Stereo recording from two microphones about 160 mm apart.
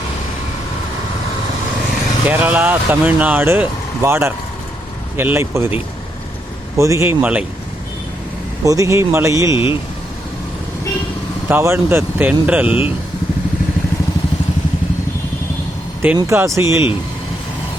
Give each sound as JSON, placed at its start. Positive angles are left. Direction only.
{"t": 2.2, "sound": "speech", "side_deg": -10}
{"t": 8.6, "sound": "speech", "side_deg": -20}
{"t": 9.5, "sound": "speech", "side_deg": 35}
{"t": 11.4, "sound": "speech", "side_deg": -15}
{"t": 16.1, "sound": "speech", "side_deg": -15}